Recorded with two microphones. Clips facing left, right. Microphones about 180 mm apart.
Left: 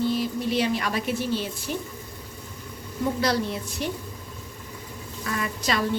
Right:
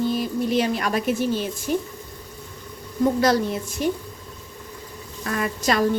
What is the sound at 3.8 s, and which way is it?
Speech, 45° right (ahead or behind).